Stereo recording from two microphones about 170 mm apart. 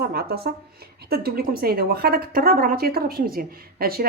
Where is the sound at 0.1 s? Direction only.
65° right (ahead or behind).